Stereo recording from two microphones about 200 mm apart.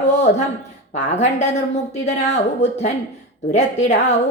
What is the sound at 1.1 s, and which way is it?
A woman's voice, 35° left (ahead or behind).